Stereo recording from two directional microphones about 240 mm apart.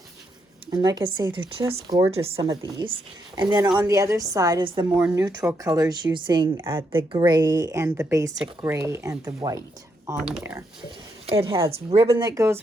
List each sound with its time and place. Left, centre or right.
0.7 s speech: centre
10.2 s speech: centre
11.3 s speech: right